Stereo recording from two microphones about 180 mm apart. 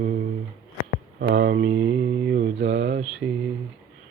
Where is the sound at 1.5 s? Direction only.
70° right (ahead or behind).